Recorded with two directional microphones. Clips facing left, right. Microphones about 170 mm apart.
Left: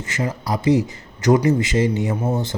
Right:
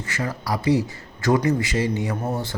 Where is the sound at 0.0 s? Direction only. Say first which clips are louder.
Left 3 dB; 20° left (ahead or behind).